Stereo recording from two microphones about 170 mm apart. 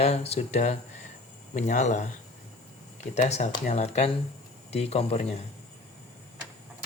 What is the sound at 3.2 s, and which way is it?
Speech, 40° left (ahead or behind).